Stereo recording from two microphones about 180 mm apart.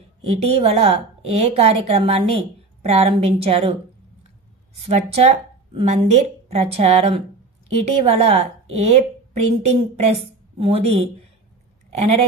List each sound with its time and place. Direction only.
0.2 s a woman's voice: 35° right (ahead or behind)
4.8 s a woman's voice: 35° right (ahead or behind)